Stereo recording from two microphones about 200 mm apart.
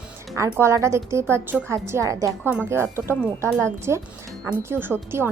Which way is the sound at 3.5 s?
5° left (ahead or behind).